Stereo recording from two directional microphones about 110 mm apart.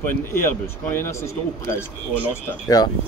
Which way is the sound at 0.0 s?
20° left (ahead or behind).